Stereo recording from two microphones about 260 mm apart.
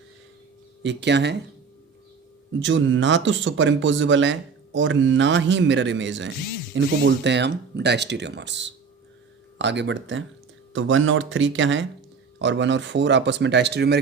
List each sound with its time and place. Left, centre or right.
0.8 s speech: right
2.5 s speech: right